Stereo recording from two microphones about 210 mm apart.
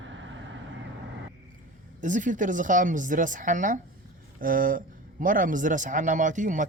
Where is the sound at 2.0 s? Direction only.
35° right (ahead or behind).